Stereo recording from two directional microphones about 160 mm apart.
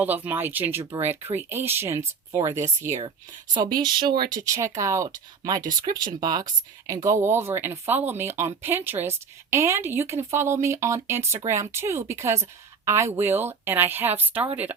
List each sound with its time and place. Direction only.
0.0 s speech: 10° right (ahead or behind)